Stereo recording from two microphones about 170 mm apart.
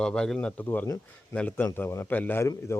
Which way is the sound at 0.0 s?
5° left (ahead or behind).